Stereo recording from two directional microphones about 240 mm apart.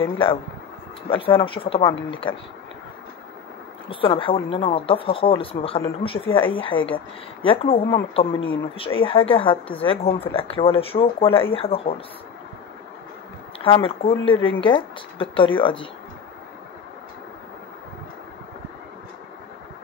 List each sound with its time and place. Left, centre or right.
1.0 s speech: left
3.9 s speech: left
13.7 s speech: left